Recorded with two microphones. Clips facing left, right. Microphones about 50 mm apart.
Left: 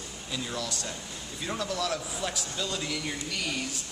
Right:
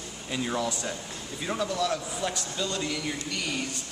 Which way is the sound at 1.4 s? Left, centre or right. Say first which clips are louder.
Right 3 dB; centre.